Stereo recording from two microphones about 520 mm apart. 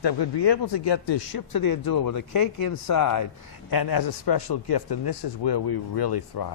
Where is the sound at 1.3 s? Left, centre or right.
Left.